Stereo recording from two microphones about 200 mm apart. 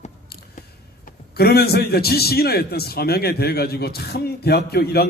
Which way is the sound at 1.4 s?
50° left (ahead or behind).